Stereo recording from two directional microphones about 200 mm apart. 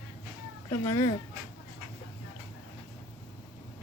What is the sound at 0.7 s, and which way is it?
Speech, 15° left (ahead or behind).